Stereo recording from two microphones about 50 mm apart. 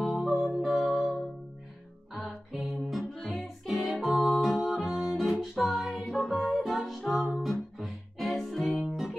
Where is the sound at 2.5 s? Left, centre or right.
Centre.